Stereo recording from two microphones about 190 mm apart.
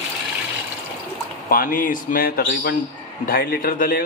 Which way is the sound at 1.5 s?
50° left (ahead or behind).